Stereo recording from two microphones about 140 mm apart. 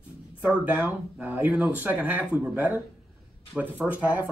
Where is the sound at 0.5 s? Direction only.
10° right (ahead or behind).